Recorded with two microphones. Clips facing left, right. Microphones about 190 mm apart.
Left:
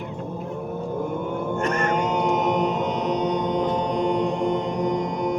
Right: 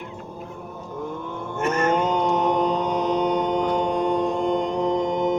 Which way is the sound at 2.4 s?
30° right (ahead or behind).